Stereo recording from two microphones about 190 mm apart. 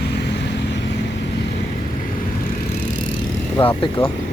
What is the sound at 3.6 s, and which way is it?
Speech, 30° left (ahead or behind).